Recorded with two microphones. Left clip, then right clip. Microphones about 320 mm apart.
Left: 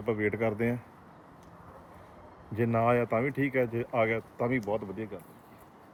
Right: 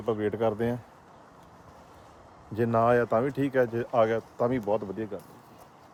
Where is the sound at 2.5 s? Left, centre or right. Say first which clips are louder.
Right 3 dB; centre.